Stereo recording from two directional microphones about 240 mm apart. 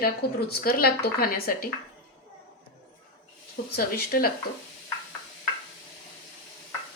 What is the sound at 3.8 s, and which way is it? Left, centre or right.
Speech, left.